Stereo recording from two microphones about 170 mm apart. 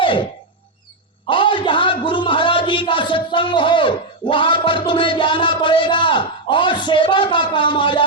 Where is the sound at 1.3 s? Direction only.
30° left (ahead or behind).